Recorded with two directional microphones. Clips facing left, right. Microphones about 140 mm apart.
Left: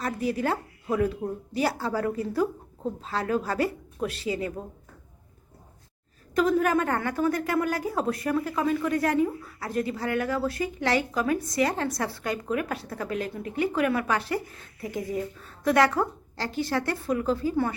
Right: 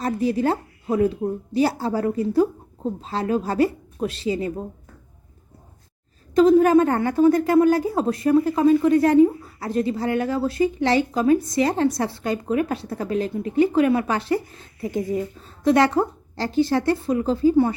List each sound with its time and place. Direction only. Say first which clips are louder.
0.0 s a woman's voice: right 6 dB; 25° right (ahead or behind)
6.3 s a woman's voice: right 9 dB; 25° right (ahead or behind)